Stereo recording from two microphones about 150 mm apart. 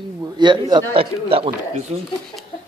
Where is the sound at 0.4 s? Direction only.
30° right (ahead or behind).